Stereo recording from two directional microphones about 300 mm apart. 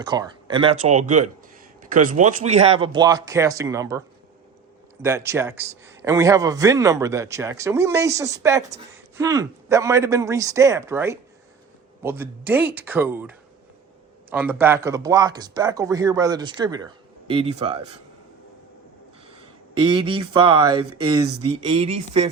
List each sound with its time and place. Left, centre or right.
0.0 s a man's voice: centre
5.0 s a man's voice: centre
19.3 s a sound: centre
21.7 s speech: centre